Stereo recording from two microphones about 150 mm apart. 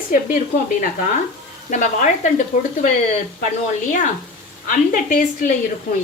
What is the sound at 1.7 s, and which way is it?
Speech, 55° left (ahead or behind).